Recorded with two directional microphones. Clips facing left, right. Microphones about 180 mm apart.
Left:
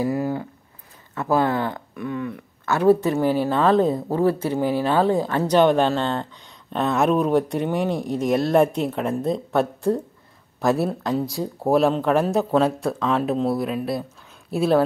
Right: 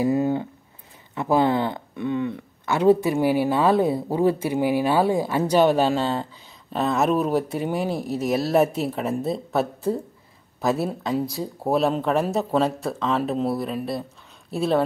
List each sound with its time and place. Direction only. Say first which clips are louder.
0.0 s speech: right 2 dB; 25° right (ahead or behind); by 14.9 s centre (ahead or behind)